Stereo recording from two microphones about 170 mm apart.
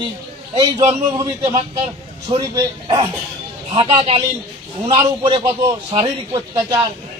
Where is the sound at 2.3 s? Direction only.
25° right (ahead or behind).